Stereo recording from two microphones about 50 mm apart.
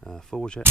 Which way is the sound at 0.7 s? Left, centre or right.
Right.